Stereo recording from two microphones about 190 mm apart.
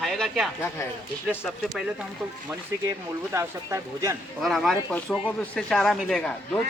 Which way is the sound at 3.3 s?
15° right (ahead or behind).